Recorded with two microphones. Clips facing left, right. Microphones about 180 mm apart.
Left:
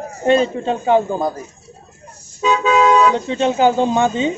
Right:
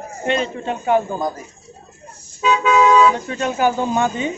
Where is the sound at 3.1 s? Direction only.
25° left (ahead or behind).